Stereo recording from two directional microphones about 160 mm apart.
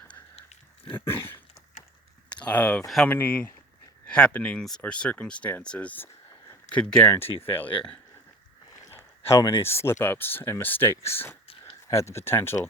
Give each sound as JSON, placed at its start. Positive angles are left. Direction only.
{"t": 0.9, "sound": "speech", "side_deg": 15}